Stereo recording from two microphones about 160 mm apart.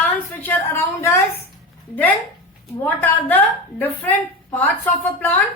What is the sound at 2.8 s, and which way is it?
Speech, 10° left (ahead or behind).